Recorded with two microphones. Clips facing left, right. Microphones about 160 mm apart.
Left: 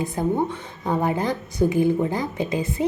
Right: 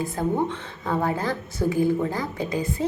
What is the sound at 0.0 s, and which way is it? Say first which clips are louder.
A woman's voice: left 1 dB; 20° left (ahead or behind).